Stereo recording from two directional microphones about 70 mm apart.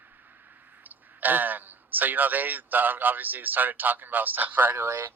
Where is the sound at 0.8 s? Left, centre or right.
Right.